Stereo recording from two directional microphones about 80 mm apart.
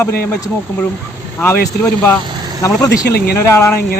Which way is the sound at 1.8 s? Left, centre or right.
Centre.